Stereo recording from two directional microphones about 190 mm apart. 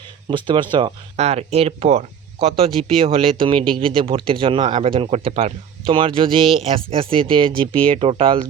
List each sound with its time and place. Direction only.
0.3 s speech: 25° right (ahead or behind)